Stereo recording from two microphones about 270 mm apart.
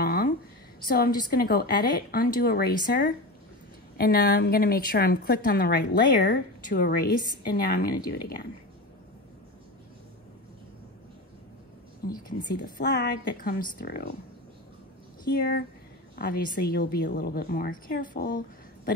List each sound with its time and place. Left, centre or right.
0.0 s a sound: left
0.8 s a woman's voice: left
12.4 s a woman's voice: left
15.2 s a woman's voice: left